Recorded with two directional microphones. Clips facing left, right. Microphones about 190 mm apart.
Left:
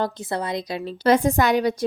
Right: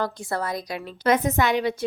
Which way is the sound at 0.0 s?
20° left (ahead or behind).